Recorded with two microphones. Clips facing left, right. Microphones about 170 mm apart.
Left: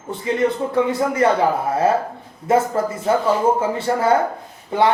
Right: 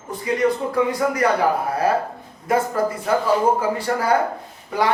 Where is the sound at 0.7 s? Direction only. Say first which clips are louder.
Left 1 dB; 25° left (ahead or behind).